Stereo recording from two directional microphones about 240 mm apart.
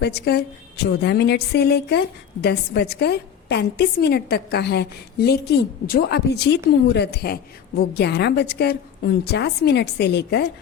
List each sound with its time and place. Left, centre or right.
0.0 s a woman's voice: left